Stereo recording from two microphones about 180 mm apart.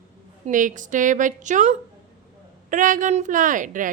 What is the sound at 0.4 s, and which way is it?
A woman's voice, 45° right (ahead or behind).